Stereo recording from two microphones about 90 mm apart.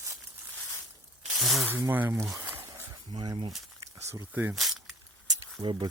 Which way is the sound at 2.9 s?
50° right (ahead or behind).